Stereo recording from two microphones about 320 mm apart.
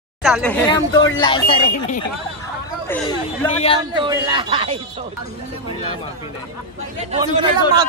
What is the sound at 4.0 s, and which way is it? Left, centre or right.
Speech, centre.